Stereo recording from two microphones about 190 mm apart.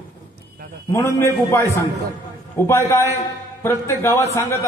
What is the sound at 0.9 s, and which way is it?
A man's voice, 15° left (ahead or behind).